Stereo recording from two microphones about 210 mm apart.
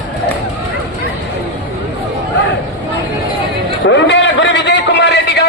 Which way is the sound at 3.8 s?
60° left (ahead or behind).